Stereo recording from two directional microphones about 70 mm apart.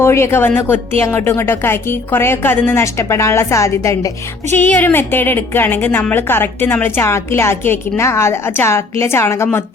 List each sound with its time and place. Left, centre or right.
0.0 s a woman's voice: left
2.8 s a woman's voice: left
4.5 s a woman's voice: left